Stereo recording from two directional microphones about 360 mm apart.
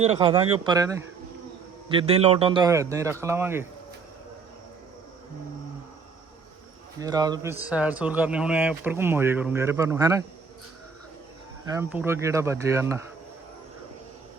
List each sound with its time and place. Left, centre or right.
0.0 s a man's voice: centre
7.0 s speech: centre
11.6 s a man's voice: centre